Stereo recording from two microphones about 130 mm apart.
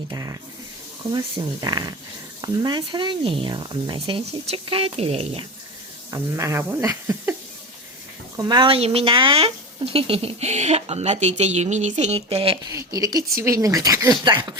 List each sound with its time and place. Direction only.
0.1 s speech: 30° right (ahead or behind)
1.6 s speech: 30° right (ahead or behind); by 5.5 s 50° right (ahead or behind)
6.1 s speech: 25° right (ahead or behind)
6.8 s a sound: 20° right (ahead or behind)
8.4 s speech: 35° right (ahead or behind); by 12.5 s 50° right (ahead or behind)
12.7 s speech: 30° right (ahead or behind)